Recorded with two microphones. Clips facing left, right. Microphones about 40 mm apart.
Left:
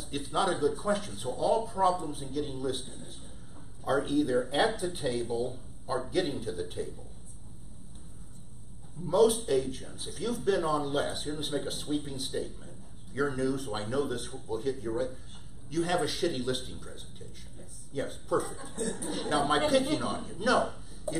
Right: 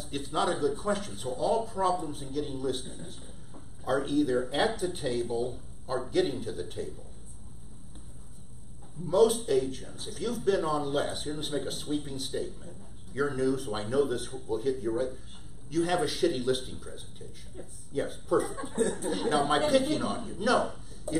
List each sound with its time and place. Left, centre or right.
0.0 s a man's voice: centre
9.0 s a man's voice: centre
18.6 s speech: right
18.9 s a man's voice: centre